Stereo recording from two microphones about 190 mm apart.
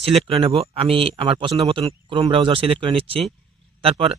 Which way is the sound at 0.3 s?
30° right (ahead or behind).